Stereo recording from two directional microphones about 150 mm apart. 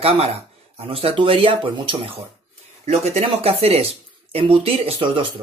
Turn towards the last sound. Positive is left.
turn(degrees=-35)  # may be behind; listen again after turning